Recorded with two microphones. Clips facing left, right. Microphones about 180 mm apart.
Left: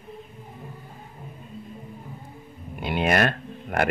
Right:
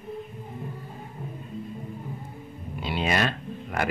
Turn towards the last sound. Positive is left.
turn(degrees=55)  # may be behind; listen again after turning